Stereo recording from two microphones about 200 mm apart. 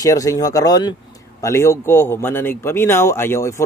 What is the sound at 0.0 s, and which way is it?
A man's voice, 15° left (ahead or behind).